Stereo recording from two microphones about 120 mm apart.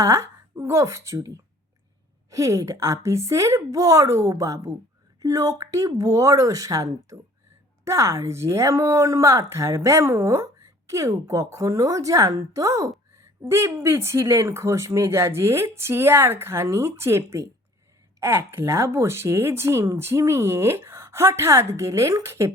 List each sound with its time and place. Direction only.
0.0 s a woman's voice: 25° right (ahead or behind)